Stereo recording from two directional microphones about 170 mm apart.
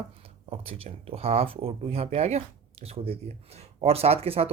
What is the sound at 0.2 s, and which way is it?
Speech, 35° right (ahead or behind).